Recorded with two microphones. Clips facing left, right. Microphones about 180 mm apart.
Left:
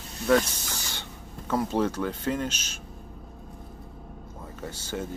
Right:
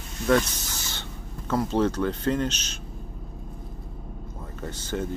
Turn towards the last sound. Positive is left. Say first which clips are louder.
# right 3 dB
turn(degrees=10)  # may be behind; listen again after turning